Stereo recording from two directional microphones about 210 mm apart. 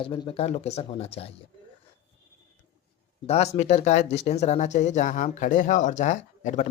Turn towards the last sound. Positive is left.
turn(degrees=35)  # may be behind; listen again after turning